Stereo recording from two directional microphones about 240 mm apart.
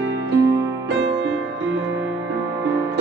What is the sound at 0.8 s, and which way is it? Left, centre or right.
Music, right.